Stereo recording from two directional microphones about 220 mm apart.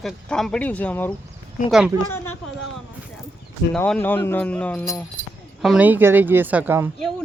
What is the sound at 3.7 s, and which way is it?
Speech, 5° left (ahead or behind).